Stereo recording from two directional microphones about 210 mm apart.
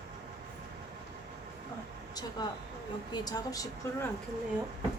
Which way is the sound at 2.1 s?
20° left (ahead or behind).